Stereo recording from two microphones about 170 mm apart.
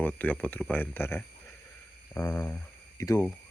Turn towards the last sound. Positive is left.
turn(degrees=20)  # may be behind; listen again after turning